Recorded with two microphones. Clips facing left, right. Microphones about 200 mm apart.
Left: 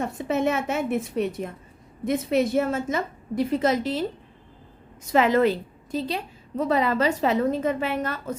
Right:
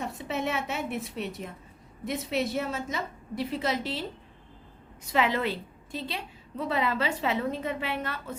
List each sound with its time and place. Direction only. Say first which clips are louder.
0.0 s a woman's voice: left 7 dB; 50° left (ahead or behind)
5.1 s a woman's voice: left 8 dB; 45° left (ahead or behind)